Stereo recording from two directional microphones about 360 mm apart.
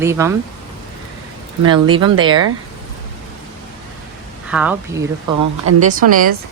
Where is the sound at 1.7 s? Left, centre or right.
Centre.